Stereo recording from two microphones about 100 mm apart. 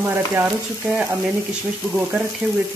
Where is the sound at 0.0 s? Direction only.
20° right (ahead or behind).